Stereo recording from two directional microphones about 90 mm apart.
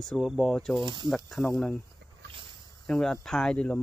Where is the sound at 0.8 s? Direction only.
60° right (ahead or behind).